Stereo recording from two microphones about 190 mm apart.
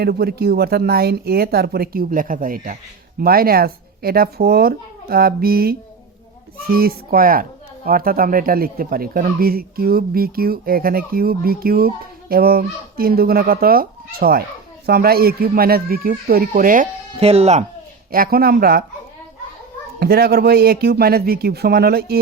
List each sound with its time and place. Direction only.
0.0 s speech: 55° right (ahead or behind)
17.2 s speech: 30° right (ahead or behind)
18.1 s speech: 50° right (ahead or behind)
20.0 s speech: 55° right (ahead or behind)